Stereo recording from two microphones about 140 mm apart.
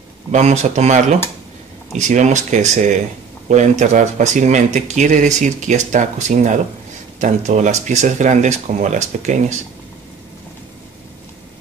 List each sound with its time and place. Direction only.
0.3 s speech: 55° right (ahead or behind)